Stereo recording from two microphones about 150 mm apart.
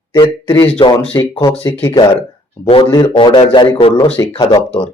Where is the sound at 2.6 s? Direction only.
30° left (ahead or behind).